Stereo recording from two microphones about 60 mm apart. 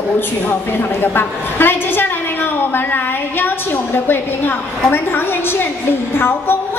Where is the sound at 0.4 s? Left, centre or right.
Left.